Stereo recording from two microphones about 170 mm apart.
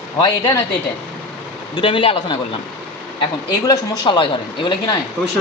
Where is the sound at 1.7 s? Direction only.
30° left (ahead or behind).